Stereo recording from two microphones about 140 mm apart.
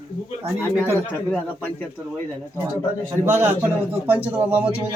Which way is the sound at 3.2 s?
20° right (ahead or behind).